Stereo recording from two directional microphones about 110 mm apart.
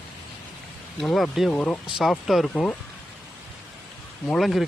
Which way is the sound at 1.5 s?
10° left (ahead or behind).